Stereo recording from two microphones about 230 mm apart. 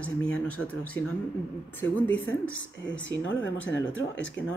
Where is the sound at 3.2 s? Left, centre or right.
Left.